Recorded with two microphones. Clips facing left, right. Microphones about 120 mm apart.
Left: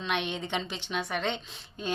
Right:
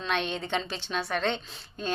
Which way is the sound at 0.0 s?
15° left (ahead or behind).